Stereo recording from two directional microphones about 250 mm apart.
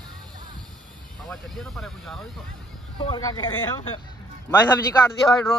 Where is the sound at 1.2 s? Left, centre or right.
Centre.